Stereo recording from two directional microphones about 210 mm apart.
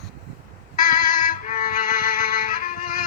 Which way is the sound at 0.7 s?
40° left (ahead or behind).